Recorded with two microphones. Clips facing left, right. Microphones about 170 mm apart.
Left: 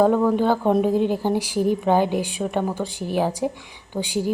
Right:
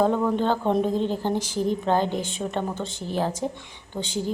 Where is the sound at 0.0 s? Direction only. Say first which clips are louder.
Left 4 dB; 10° left (ahead or behind).